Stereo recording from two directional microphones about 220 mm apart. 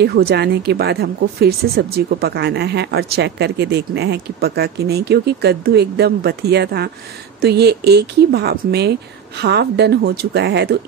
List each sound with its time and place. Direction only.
0.0 s speech: 45° right (ahead or behind)